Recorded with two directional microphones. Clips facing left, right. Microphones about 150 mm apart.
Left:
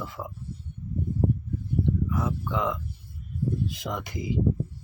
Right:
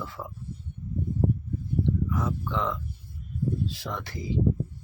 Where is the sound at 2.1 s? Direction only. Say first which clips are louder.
Left 1 dB; 10° left (ahead or behind).